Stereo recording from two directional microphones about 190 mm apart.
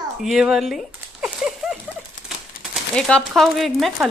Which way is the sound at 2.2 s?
Centre (ahead or behind).